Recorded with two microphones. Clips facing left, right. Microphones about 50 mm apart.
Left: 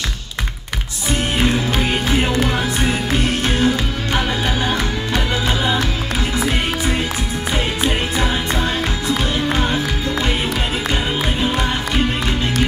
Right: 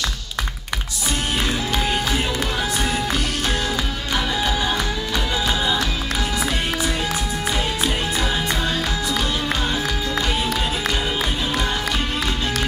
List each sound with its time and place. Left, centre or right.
1.4 s music: left
6.3 s music: left
9.5 s music: left